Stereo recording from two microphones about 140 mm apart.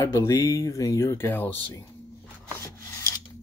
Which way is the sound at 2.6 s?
20° left (ahead or behind).